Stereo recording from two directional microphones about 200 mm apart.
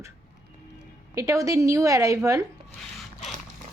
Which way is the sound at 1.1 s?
15° right (ahead or behind).